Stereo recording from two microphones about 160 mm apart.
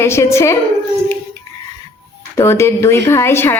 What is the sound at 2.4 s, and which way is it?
A woman's voice, 15° left (ahead or behind).